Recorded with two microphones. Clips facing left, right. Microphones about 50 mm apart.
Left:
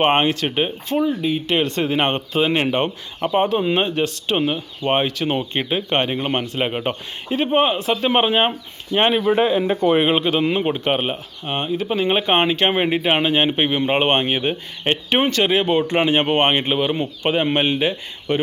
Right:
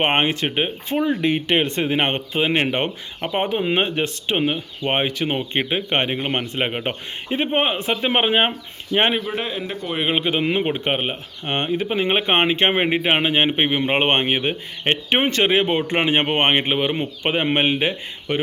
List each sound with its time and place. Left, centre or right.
0.1 s speech: right
1.5 s speech: right
9.3 s speech: centre
9.6 s speech: left
10.1 s speech: centre
11.4 s speech: right
11.9 s speech: right